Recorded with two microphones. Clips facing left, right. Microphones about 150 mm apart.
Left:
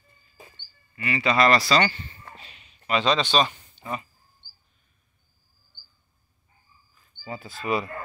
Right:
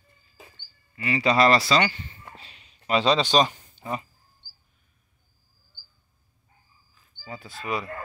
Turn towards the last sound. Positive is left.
turn(degrees=0)  # may be behind; listen again after turning